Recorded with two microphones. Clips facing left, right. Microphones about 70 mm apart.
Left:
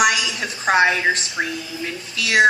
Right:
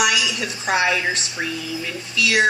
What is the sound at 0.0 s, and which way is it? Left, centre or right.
A woman's voice, left.